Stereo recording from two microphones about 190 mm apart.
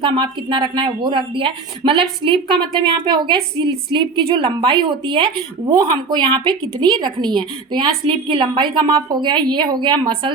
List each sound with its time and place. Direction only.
0.0 s a woman's voice: 25° right (ahead or behind)